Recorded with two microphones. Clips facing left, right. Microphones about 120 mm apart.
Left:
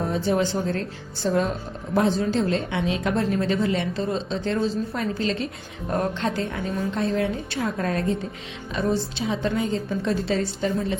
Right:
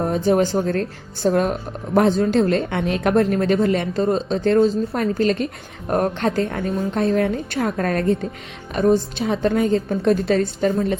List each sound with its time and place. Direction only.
0.1 s a woman's voice: 50° right (ahead or behind)